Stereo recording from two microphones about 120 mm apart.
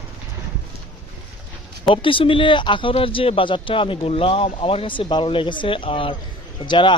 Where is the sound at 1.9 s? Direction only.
45° left (ahead or behind).